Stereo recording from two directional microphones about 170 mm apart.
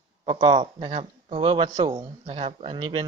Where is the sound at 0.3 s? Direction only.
30° right (ahead or behind).